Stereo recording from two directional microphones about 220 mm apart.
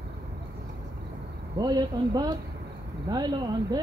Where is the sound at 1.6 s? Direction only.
15° right (ahead or behind).